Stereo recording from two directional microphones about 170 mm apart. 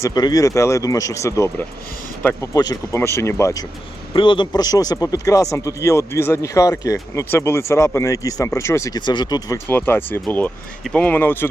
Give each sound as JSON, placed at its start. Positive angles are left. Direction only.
{"t": 0.0, "sound": "speech", "side_deg": 25}
{"t": 9.6, "sound": "speech", "side_deg": 10}